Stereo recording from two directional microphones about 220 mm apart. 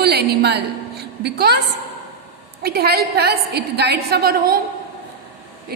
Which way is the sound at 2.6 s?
45° right (ahead or behind).